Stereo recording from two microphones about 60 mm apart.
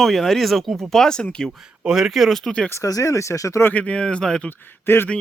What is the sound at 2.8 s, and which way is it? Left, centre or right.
Speech, left.